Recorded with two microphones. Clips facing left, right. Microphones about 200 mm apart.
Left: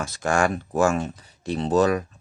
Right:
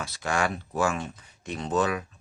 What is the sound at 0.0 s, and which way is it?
Speech, 45° left (ahead or behind).